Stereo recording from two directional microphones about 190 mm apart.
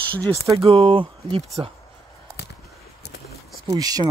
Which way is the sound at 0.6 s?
30° right (ahead or behind).